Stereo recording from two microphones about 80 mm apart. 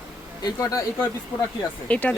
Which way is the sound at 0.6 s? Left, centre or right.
Left.